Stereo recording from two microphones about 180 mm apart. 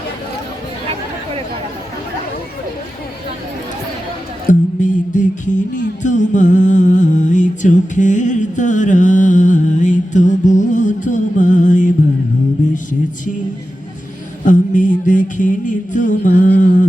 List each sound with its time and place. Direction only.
4.8 s music: 45° left (ahead or behind)
14.4 s mantra: 45° left (ahead or behind)